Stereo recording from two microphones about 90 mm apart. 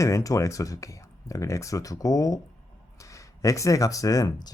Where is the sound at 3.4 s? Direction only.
40° left (ahead or behind).